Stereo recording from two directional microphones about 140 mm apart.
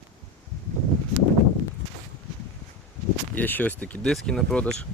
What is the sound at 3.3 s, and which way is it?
Speech, 10° left (ahead or behind).